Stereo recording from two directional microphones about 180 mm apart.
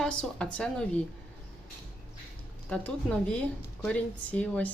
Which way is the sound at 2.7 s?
5° left (ahead or behind).